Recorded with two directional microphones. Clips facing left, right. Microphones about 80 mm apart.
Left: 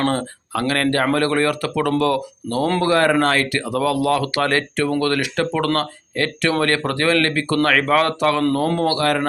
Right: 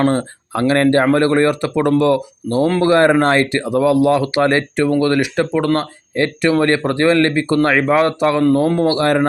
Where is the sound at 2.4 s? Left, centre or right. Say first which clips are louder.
Right 6 dB; centre.